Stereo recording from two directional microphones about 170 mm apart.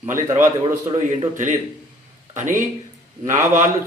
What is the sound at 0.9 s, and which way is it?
A man's voice, 45° right (ahead or behind).